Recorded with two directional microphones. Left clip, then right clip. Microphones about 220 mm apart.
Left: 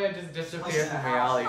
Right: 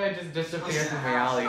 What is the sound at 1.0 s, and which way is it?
Speech, 15° left (ahead or behind).